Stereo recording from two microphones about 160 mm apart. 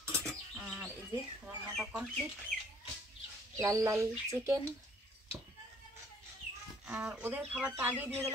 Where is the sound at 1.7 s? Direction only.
Centre (ahead or behind).